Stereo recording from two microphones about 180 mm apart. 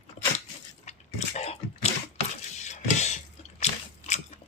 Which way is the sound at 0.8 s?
40° left (ahead or behind).